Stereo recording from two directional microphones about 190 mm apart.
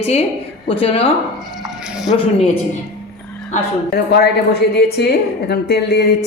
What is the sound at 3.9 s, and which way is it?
A woman's voice, 55° left (ahead or behind).